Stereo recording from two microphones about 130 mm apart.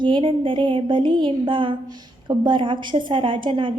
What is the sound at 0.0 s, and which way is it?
A woman's voice, 40° right (ahead or behind).